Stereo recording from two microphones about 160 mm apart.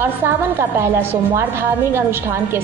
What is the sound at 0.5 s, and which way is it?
Speech, 15° right (ahead or behind).